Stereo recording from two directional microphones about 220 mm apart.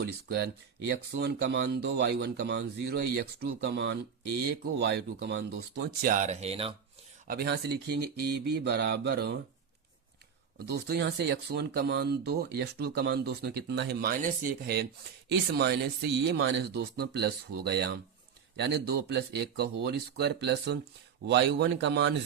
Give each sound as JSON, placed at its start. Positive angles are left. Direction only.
{"t": 0.0, "sound": "speech", "side_deg": -45}
{"t": 3.7, "sound": "speech", "side_deg": -55}
{"t": 7.3, "sound": "speech", "side_deg": -45}
{"t": 10.6, "sound": "speech", "side_deg": -45}